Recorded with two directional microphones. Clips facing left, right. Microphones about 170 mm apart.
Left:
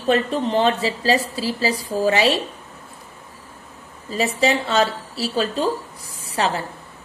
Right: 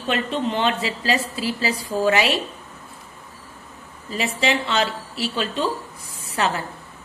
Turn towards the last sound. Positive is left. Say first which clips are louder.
# left 1 dB
turn(degrees=35)  # may be behind; listen again after turning